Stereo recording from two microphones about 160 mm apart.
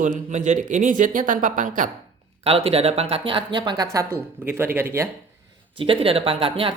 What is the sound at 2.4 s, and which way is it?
Speech, 35° right (ahead or behind).